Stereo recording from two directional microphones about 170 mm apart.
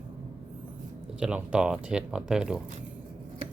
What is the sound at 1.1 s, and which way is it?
Speech, 5° right (ahead or behind).